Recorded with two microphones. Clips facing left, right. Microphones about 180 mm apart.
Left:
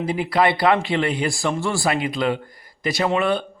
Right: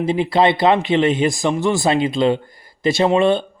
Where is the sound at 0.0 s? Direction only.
25° right (ahead or behind).